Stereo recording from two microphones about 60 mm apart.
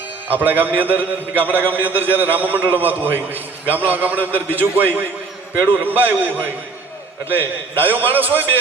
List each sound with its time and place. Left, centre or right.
0.3 s a man's voice: right